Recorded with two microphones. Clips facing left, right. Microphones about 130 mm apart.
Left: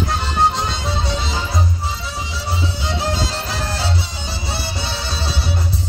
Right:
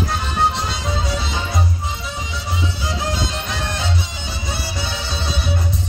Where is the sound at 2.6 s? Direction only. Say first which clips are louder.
Left 1 dB; 30° left (ahead or behind).